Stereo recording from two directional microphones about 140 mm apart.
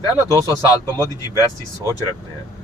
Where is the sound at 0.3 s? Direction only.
25° right (ahead or behind).